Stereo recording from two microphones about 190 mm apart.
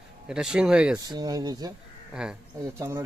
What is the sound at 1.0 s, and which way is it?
Speech, 20° right (ahead or behind).